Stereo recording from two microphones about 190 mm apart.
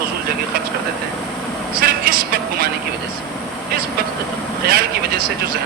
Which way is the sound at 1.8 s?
50° right (ahead or behind).